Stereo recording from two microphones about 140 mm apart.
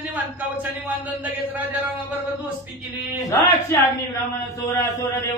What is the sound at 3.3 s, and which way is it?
Speech, 25° left (ahead or behind).